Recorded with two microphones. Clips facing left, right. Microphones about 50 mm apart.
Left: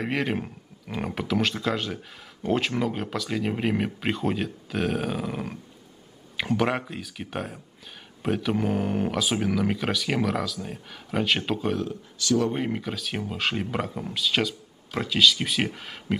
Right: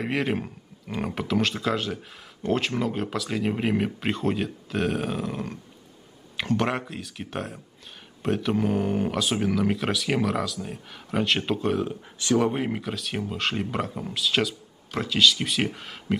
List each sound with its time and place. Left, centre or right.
0.0 s speech: centre
11.8 s speech: right
12.5 s speech: centre